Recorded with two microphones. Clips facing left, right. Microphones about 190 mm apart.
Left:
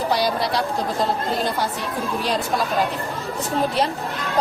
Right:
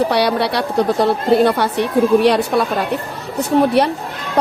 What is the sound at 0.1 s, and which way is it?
A woman's voice, 70° right (ahead or behind).